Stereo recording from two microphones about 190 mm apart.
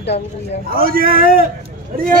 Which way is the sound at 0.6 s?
50° right (ahead or behind).